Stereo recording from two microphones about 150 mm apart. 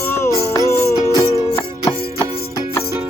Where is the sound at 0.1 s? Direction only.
15° left (ahead or behind).